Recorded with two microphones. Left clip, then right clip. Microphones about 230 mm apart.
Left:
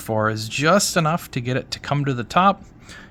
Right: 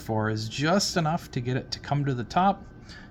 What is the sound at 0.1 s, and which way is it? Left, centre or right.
Speech, left.